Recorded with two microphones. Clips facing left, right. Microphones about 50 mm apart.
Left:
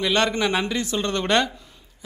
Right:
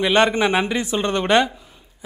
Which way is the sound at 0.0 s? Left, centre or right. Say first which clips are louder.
Right 5 dB; right.